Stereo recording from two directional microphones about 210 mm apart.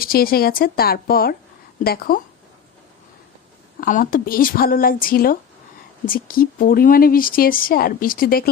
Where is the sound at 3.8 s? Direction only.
40° left (ahead or behind).